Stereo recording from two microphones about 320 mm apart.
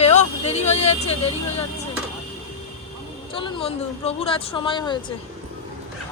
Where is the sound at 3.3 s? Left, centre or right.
Centre.